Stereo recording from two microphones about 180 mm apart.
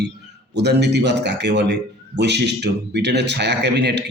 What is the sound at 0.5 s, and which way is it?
Speech, 65° right (ahead or behind).